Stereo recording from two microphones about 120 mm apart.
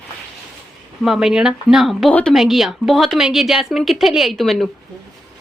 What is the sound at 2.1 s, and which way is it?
Speech, 10° left (ahead or behind).